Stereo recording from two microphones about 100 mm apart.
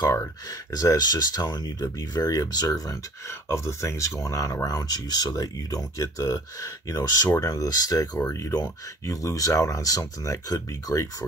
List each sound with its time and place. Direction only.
0.1 s speech: 30° left (ahead or behind)